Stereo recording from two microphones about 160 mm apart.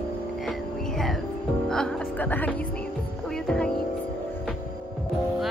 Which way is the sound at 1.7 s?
5° left (ahead or behind).